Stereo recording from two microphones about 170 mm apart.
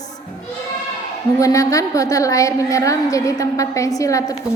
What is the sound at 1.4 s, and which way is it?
A woman's voice, 20° left (ahead or behind).